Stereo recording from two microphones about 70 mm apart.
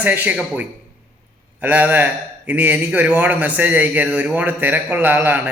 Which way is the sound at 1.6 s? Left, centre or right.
Right.